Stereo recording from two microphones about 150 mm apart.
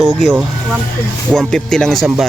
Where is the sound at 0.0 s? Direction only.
Centre (ahead or behind).